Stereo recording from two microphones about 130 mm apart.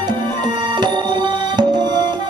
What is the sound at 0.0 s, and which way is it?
Music, 35° right (ahead or behind).